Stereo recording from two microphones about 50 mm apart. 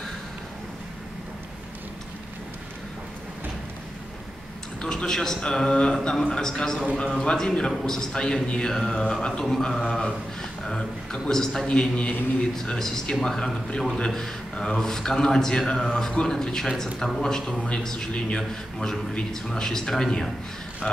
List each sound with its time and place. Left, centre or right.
4.8 s a man's voice: centre
11.6 s a man's voice: left
12.5 s a man's voice: centre